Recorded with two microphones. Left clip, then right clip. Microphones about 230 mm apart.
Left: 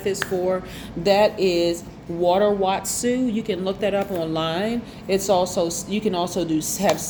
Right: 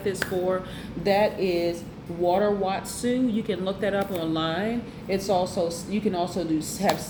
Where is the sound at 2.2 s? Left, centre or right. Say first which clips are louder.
Left 4 dB; left.